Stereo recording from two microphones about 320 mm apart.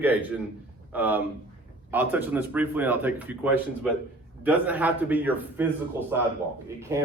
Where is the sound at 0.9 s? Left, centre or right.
Centre.